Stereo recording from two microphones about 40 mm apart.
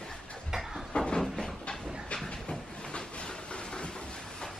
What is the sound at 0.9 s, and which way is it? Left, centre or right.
Cupboard open or close, left.